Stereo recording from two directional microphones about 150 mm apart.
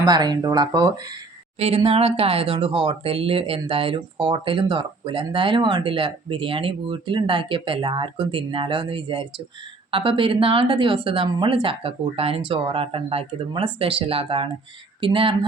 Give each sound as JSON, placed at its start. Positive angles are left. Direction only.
{"t": 0.0, "sound": "speech", "side_deg": -25}
{"t": 1.5, "sound": "speech", "side_deg": -40}